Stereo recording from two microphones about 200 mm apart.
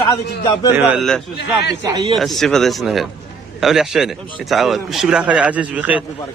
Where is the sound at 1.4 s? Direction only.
60° left (ahead or behind).